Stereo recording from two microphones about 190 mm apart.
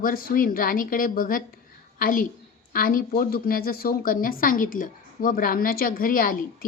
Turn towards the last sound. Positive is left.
turn(degrees=50)  # may be behind; listen again after turning